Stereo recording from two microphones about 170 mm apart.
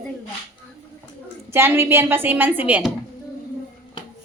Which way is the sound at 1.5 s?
15° right (ahead or behind).